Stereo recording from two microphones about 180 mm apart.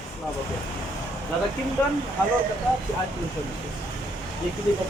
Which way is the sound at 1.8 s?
15° left (ahead or behind).